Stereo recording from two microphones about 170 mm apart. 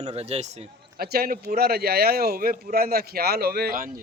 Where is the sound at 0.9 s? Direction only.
65° right (ahead or behind).